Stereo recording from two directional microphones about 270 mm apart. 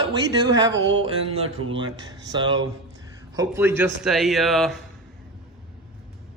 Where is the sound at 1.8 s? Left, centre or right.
Centre.